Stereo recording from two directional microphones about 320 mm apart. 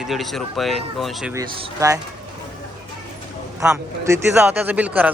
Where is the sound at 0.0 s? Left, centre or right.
Centre.